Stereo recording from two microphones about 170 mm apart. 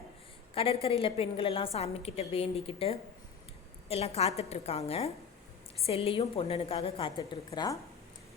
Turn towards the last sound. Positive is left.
turn(degrees=25)  # may be behind; listen again after turning